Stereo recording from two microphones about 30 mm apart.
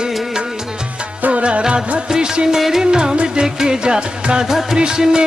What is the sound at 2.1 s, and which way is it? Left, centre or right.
Music, right.